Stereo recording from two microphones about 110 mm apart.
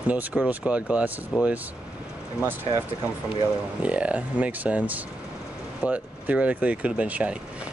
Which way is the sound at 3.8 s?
10° right (ahead or behind).